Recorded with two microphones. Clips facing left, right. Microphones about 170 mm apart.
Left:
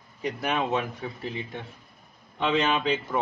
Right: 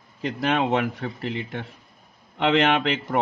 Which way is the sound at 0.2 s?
80° right.